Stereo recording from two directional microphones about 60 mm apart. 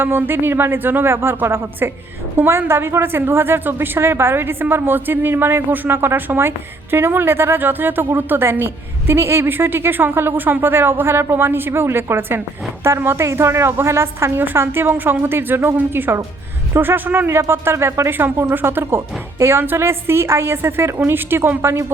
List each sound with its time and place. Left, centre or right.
0.0 s a woman's voice: right
18.4 s a woman's voice: right